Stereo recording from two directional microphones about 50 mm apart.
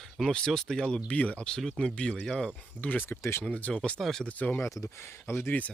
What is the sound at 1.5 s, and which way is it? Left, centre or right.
Speech, centre.